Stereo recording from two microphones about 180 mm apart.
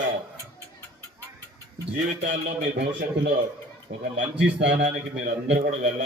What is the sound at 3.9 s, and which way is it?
Speech, 45° right (ahead or behind).